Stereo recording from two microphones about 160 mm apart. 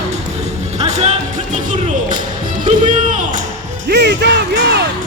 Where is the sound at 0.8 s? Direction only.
45° right (ahead or behind).